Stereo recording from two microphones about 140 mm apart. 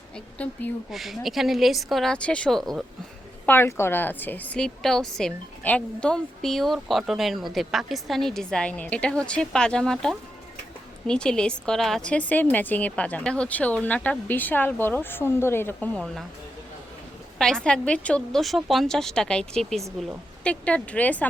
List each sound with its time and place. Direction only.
0.9 s a woman's voice: centre (ahead or behind)
3.4 s a woman's voice: 15° left (ahead or behind)
17.3 s a woman's voice: 5° left (ahead or behind)